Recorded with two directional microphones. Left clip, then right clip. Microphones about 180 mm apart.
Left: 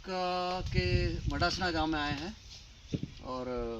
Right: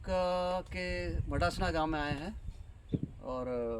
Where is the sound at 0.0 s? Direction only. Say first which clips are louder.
Right 1 dB; 40° right (ahead or behind).